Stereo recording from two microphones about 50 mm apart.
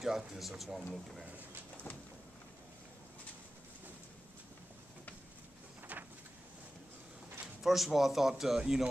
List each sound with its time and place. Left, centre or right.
0.0 s speech: centre
7.6 s speech: centre